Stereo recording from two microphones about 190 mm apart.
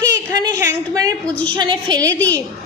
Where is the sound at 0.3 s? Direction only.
20° right (ahead or behind).